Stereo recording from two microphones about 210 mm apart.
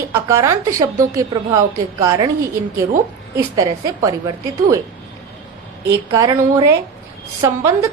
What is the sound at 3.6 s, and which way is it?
A woman's voice, 15° right (ahead or behind).